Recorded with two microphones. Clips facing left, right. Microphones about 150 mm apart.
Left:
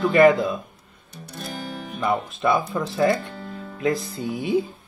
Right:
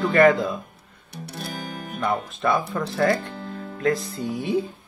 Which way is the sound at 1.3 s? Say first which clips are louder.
Left 1 dB; 60° right (ahead or behind).